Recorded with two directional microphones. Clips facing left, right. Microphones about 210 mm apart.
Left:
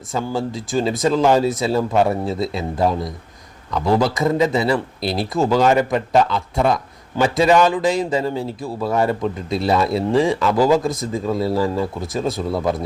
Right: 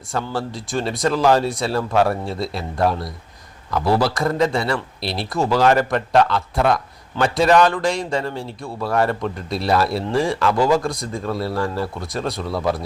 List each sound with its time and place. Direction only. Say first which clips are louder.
0.1 s a man's voice: left 2 dB; centre (ahead or behind)
12.5 s speech: even; 20° left (ahead or behind)